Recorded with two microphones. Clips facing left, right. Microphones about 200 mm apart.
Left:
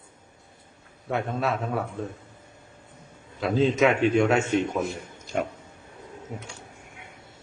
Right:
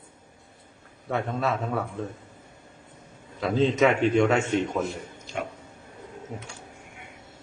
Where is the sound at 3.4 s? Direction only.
Centre (ahead or behind).